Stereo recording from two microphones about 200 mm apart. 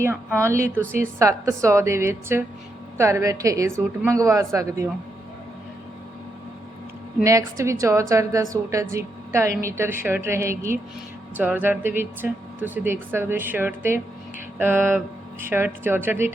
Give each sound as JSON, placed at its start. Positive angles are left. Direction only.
{"t": 0.3, "sound": "speech", "side_deg": -15}
{"t": 7.2, "sound": "speech", "side_deg": -15}